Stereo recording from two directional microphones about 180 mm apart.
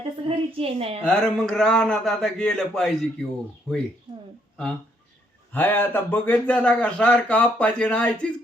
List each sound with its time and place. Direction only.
0.3 s a woman's voice: 30° right (ahead or behind)
1.0 s a man's voice: 5° left (ahead or behind)
5.5 s speech: 10° left (ahead or behind)